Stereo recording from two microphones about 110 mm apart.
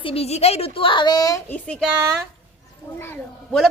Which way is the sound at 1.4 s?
10° left (ahead or behind).